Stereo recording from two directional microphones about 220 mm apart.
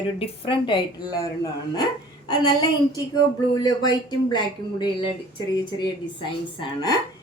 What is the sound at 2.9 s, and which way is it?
A woman's voice, 20° left (ahead or behind).